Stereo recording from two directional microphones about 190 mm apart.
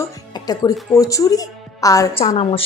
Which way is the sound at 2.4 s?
30° left (ahead or behind).